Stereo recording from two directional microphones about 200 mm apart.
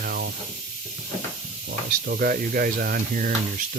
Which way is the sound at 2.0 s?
50° right (ahead or behind).